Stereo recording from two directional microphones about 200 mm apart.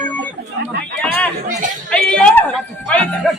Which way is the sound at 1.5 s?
40° right (ahead or behind).